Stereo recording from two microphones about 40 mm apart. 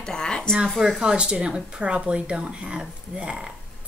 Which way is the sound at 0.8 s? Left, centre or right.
Centre.